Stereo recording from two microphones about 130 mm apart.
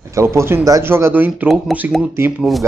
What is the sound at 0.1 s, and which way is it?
Speech, 20° right (ahead or behind).